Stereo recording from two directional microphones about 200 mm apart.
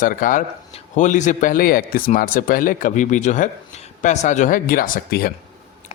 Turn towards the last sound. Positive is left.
turn(degrees=45)  # may be behind; listen again after turning